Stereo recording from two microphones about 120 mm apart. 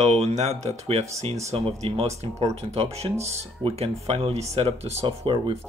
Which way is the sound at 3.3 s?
55° right (ahead or behind).